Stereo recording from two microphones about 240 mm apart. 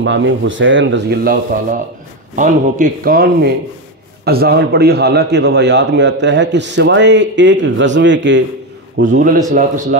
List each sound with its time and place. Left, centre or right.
0.0 s a man's voice: right
9.1 s speech: right